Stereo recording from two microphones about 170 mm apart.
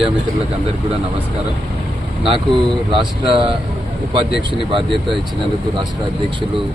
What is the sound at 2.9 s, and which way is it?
Speech, 30° right (ahead or behind).